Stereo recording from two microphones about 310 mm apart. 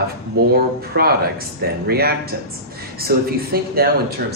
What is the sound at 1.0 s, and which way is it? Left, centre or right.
Speech, right.